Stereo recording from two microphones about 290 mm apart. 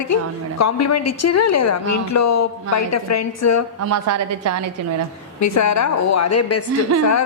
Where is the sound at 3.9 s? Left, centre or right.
Right.